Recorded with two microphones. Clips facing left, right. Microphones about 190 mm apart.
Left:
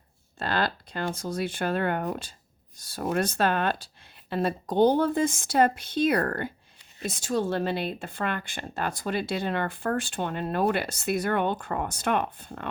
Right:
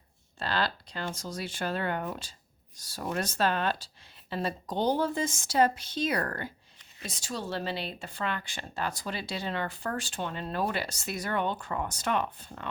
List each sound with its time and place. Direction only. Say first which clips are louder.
0.3 s a woman's voice: left 3 dB; 50° left (ahead or behind)